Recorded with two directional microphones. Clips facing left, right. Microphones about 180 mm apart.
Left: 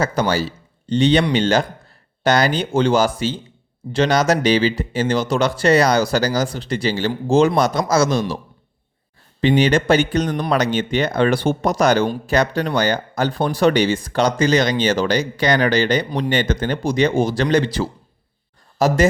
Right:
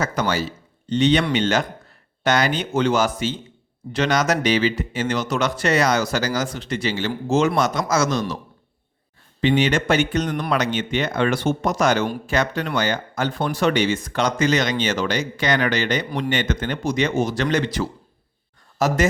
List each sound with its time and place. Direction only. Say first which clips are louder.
0.0 s speech: left 3 dB; 30° left (ahead or behind)
9.4 s speech: left 3 dB; 35° left (ahead or behind)